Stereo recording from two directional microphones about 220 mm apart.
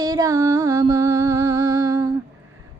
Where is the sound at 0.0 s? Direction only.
15° right (ahead or behind).